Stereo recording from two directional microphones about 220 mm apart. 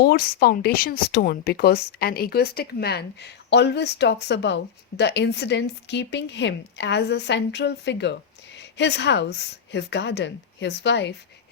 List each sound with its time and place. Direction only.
0.0 s speech: 45° left (ahead or behind)